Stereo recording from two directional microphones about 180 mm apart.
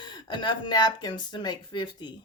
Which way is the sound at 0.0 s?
25° left (ahead or behind).